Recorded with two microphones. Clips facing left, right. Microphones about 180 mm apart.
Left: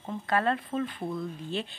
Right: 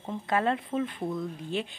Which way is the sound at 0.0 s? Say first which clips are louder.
Even; 15° right (ahead or behind).